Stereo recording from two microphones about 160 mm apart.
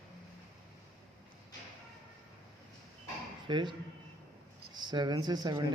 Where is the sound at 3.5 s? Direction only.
30° right (ahead or behind).